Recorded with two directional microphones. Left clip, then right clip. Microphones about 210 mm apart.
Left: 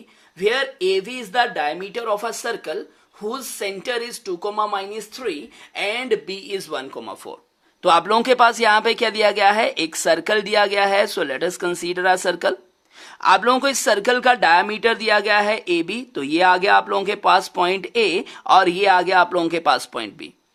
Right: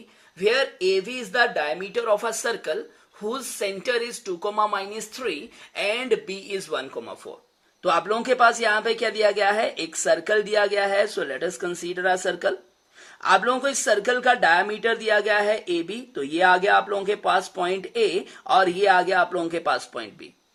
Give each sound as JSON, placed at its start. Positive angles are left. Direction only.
{"t": 0.3, "sound": "speech", "side_deg": 25}
{"t": 7.8, "sound": "speech", "side_deg": 45}